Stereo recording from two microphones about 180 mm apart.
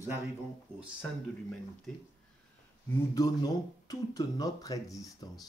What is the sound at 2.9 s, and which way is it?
Speech, 20° left (ahead or behind).